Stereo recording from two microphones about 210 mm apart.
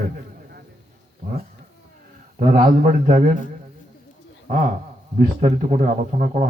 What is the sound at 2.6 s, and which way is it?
Speech, 40° right (ahead or behind).